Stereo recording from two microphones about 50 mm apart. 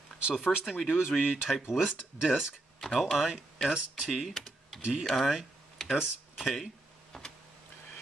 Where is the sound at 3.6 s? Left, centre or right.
Centre.